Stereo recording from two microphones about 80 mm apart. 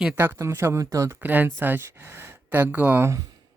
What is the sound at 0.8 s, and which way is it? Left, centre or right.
Speech, right.